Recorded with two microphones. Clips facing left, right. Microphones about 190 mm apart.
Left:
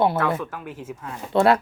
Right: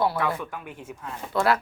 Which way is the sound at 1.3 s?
25° left (ahead or behind).